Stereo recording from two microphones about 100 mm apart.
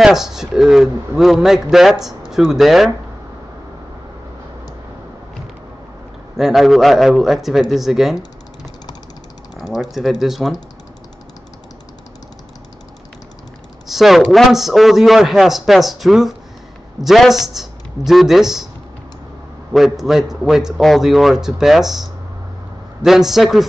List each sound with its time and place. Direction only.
0.0 s a man's voice: 5° right (ahead or behind)
6.3 s a man's voice: 5° right (ahead or behind)
9.8 s a man's voice: centre (ahead or behind)
13.8 s a man's voice: 5° right (ahead or behind)
19.7 s a man's voice: centre (ahead or behind)